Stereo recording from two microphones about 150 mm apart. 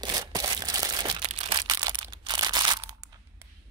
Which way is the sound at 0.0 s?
25° right (ahead or behind).